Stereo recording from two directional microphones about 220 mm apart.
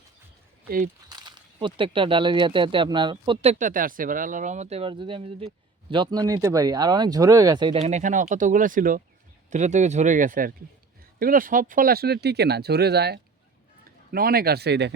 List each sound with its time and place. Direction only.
1.0 s speech: 20° right (ahead or behind); by 14.9 s 50° right (ahead or behind)